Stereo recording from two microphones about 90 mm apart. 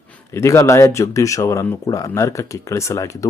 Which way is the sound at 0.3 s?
30° left (ahead or behind).